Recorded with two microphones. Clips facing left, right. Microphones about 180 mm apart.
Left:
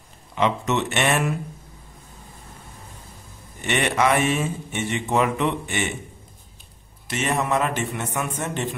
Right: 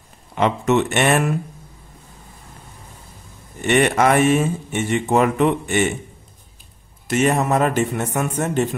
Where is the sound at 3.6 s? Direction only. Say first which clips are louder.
Right 5 dB; 45° right (ahead or behind).